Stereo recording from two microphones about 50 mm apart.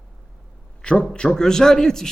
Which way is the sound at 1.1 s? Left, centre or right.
Centre.